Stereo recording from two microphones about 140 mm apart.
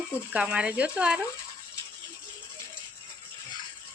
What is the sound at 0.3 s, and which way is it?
Speech, 10° right (ahead or behind).